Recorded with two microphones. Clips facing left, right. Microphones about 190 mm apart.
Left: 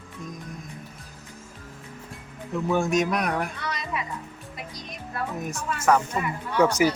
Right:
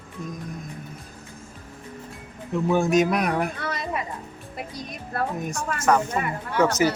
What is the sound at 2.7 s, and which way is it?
Speech, centre (ahead or behind).